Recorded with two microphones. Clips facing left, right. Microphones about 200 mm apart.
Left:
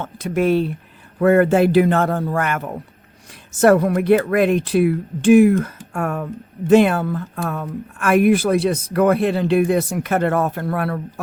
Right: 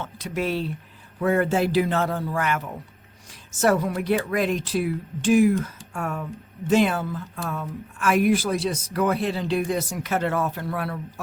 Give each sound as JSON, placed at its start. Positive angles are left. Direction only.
{"t": 0.0, "sound": "speech", "side_deg": 50}